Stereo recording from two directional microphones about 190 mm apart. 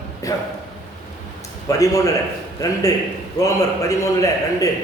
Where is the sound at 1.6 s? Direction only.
15° left (ahead or behind).